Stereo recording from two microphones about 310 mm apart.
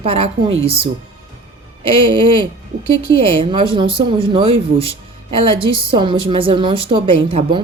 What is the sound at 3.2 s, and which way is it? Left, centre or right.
A woman's voice, centre.